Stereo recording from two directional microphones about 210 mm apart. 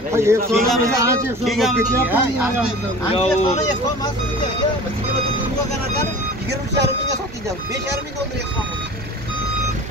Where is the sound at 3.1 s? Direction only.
25° left (ahead or behind).